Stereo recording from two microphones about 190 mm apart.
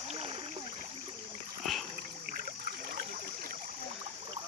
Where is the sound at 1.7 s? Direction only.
Centre (ahead or behind).